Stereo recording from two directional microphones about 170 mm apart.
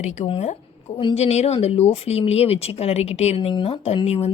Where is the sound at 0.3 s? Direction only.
35° left (ahead or behind).